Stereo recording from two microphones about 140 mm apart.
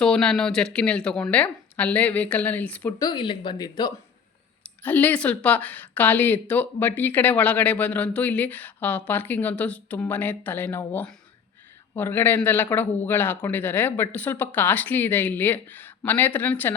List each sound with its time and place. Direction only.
0.0 s speech: 5° left (ahead or behind)
3.0 s speech: 35° left (ahead or behind)
4.8 s speech: 10° left (ahead or behind)